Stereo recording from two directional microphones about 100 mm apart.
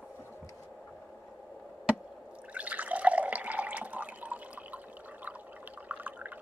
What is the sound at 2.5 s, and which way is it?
Water, 15° right (ahead or behind).